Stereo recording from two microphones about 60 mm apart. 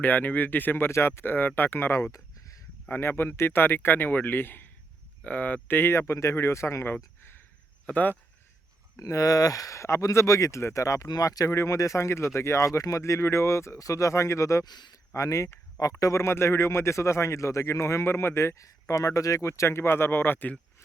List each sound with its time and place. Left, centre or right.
0.0 s speech: left
2.1 s a sound: left
2.9 s speech: left
5.6 s speech: left
7.9 s speech: left
9.0 s speech: left
11.9 s speech: left
15.8 s speech: left
18.1 s speech: left
18.5 s speech: left